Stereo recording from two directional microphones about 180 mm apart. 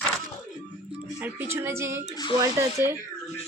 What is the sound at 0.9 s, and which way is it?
Speech, 10° right (ahead or behind).